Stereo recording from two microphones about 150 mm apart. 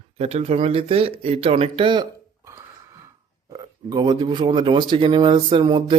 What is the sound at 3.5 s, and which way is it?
Speech, 25° right (ahead or behind).